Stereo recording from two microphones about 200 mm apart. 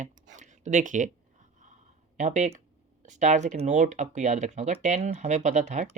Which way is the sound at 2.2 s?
40° right (ahead or behind).